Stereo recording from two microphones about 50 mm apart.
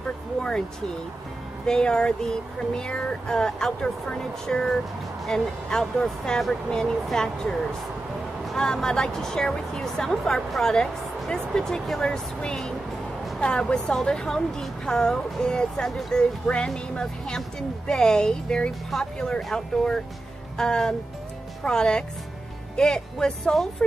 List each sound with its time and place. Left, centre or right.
0.4 s vehicle: centre
1.7 s speech: centre
8.5 s speech: centre
12.0 s a woman's voice: centre
14.0 s speech: centre